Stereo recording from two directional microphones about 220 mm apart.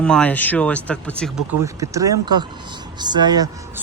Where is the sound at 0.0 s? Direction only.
5° left (ahead or behind).